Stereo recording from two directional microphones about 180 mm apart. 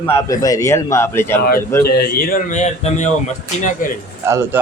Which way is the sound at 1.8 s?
60° left (ahead or behind).